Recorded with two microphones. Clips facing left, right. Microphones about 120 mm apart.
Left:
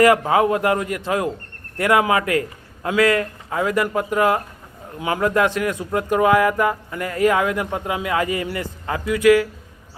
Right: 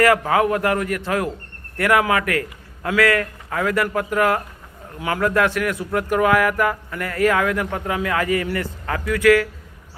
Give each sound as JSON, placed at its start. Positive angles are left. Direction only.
{"t": 0.0, "sound": "a man's voice", "side_deg": 20}